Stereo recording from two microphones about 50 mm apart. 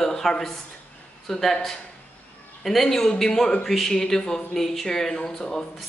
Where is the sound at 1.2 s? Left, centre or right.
Centre.